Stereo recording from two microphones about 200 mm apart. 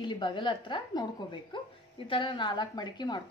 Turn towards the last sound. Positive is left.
turn(degrees=20)  # may be behind; listen again after turning